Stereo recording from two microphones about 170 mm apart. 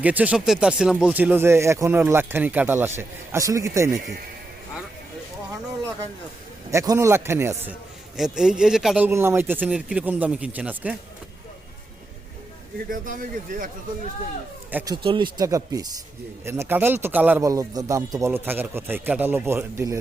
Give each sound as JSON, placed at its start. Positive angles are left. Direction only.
{"t": 0.0, "sound": "speech", "side_deg": -10}
{"t": 6.7, "sound": "speech", "side_deg": -20}
{"t": 8.1, "sound": "speech", "side_deg": -5}
{"t": 12.9, "sound": "speech", "side_deg": -55}
{"t": 14.7, "sound": "speech", "side_deg": -10}
{"t": 15.0, "sound": "speech", "side_deg": -30}